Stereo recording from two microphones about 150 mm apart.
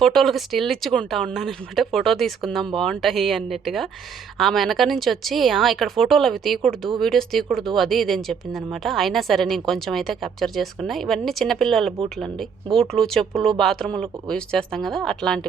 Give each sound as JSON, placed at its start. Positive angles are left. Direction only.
{"t": 0.0, "sound": "a woman's voice", "side_deg": 0}